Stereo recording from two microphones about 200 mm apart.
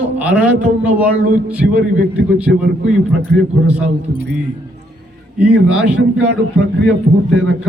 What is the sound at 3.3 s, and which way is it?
Speech, 55° right (ahead or behind).